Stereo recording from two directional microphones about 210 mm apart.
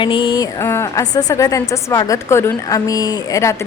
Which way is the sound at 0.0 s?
25° left (ahead or behind).